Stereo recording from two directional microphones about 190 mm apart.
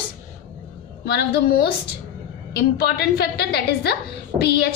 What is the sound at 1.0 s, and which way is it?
Speech, 60° left (ahead or behind).